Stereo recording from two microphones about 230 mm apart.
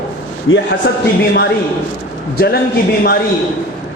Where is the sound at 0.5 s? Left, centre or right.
Left.